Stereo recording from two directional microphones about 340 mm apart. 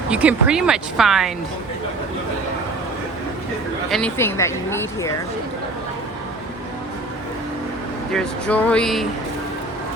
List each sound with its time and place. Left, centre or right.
0.1 s a woman's voice: centre
3.8 s speech: centre
8.1 s a woman's voice: centre